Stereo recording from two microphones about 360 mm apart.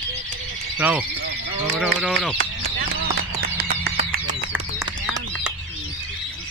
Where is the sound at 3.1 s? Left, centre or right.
Right.